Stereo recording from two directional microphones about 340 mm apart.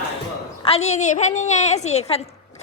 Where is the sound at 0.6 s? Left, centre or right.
Centre.